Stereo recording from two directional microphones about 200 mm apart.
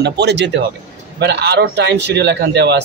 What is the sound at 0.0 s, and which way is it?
A man's voice, 60° right (ahead or behind).